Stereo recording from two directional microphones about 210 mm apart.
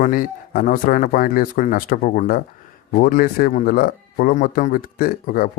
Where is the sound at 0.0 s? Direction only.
40° left (ahead or behind).